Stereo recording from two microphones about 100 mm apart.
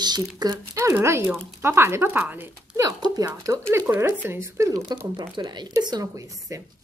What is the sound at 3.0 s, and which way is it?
Speech, 35° right (ahead or behind).